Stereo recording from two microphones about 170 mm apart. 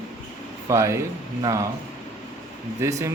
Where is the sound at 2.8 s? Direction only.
20° right (ahead or behind).